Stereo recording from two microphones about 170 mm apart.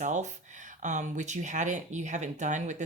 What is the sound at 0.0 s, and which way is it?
Speech, 45° right (ahead or behind).